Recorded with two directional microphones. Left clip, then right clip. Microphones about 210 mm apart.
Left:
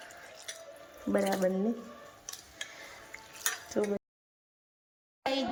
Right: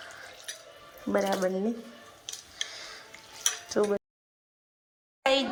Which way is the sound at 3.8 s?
10° left (ahead or behind).